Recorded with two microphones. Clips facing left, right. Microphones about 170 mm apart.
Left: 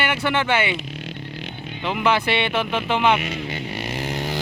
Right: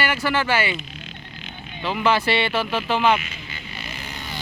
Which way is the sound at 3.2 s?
75° left (ahead or behind).